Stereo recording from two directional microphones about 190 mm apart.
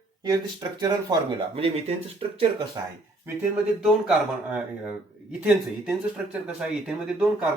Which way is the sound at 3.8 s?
5° right (ahead or behind).